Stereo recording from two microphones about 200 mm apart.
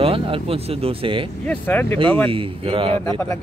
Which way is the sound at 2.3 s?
25° right (ahead or behind).